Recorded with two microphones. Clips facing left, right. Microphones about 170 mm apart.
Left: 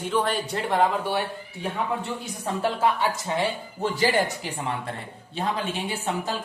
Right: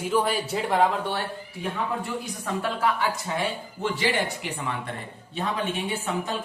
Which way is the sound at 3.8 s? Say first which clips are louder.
Left 3 dB; 40° left (ahead or behind).